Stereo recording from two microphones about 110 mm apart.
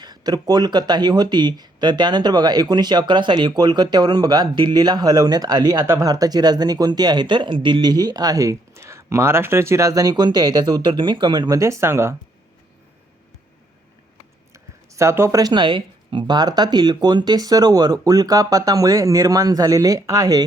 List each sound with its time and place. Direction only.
0.0 s speech: 40° right (ahead or behind)
6.1 s speech: 35° right (ahead or behind)
14.5 s speech: 25° right (ahead or behind)